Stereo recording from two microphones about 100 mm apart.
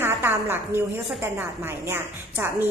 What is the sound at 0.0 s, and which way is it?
A woman's voice, 25° right (ahead or behind).